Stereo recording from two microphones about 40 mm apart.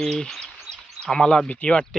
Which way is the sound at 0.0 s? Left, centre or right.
Centre.